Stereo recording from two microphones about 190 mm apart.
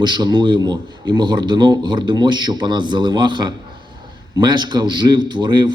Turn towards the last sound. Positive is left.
turn(degrees=-20)  # may be behind; listen again after turning